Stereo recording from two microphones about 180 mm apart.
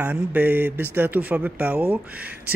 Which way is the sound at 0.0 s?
10° right (ahead or behind).